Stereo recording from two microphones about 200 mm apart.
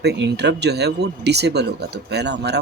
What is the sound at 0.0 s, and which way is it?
Speech, 55° right (ahead or behind).